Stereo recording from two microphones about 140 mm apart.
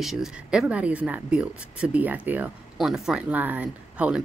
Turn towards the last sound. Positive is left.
turn(degrees=-10)  # may be behind; listen again after turning